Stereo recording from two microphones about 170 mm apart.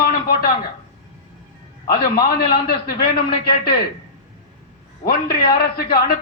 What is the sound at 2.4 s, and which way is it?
Speech, 65° left (ahead or behind).